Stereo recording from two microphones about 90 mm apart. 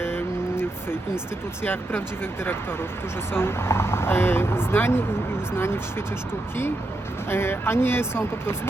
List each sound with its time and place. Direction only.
1.6 s speech: 25° left (ahead or behind)
7.3 s speech: 25° left (ahead or behind)